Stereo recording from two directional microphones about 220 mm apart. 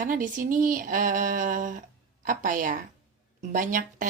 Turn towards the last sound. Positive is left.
turn(degrees=-35)  # may be behind; listen again after turning